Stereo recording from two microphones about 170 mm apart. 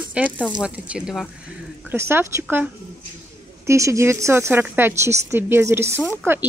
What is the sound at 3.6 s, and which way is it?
A woman's voice, 15° right (ahead or behind).